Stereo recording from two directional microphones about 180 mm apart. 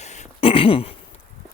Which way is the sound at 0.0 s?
40° left (ahead or behind).